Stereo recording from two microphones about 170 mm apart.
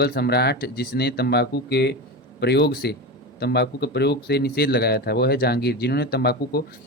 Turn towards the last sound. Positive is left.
turn(degrees=70)  # may be behind; listen again after turning